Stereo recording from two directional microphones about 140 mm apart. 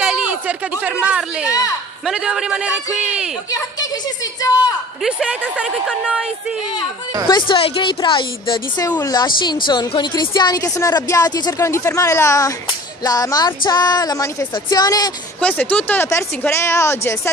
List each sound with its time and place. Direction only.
0.0 s a sound: 10° right (ahead or behind)
2.0 s a man's voice: 5° right (ahead or behind)
5.0 s speech: 5° right (ahead or behind)
7.2 s a woman's voice: 35° left (ahead or behind)
15.4 s speech: 10° left (ahead or behind)